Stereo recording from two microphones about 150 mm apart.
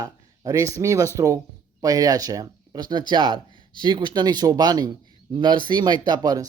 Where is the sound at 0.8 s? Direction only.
20° right (ahead or behind).